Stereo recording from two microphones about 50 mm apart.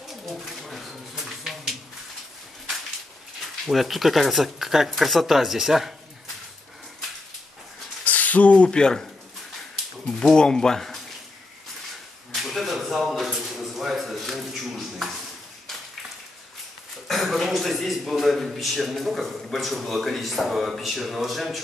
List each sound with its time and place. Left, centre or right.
0.1 s pigeon: centre
3.3 s a man's voice: centre
8.0 s speech: left; by 11.0 s centre
12.4 s a sound: centre
17.1 s a man's voice: centre